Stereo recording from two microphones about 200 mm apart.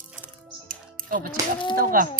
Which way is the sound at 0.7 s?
45° right (ahead or behind).